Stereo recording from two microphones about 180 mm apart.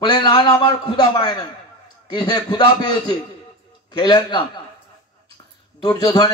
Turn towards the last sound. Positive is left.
turn(degrees=25)  # may be behind; listen again after turning